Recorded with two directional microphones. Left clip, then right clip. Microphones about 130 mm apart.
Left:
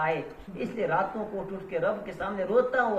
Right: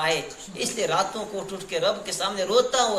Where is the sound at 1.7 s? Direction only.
20° right (ahead or behind).